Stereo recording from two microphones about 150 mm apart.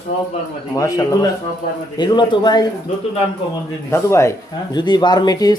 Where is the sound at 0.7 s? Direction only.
20° left (ahead or behind).